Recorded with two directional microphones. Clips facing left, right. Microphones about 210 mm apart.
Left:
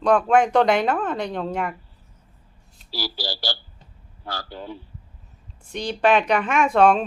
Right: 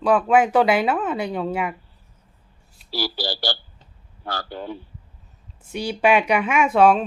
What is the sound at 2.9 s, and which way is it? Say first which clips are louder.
Speech: right 4 dB; 60° right (ahead or behind).